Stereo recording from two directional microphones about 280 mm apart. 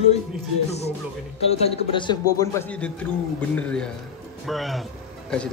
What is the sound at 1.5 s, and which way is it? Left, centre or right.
A man's voice, centre.